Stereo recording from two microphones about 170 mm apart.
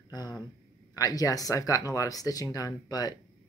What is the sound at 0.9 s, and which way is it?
Speech, 20° left (ahead or behind).